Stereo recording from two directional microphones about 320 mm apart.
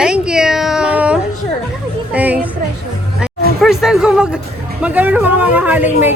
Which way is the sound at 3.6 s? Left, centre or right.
Centre.